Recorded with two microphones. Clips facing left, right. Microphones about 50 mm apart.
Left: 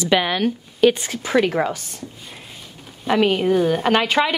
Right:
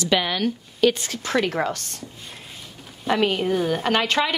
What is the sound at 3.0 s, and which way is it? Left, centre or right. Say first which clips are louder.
A woman's voice: left 4 dB; centre.